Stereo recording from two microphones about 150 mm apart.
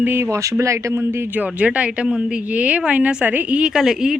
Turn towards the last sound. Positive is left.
turn(degrees=-5)  # may be behind; listen again after turning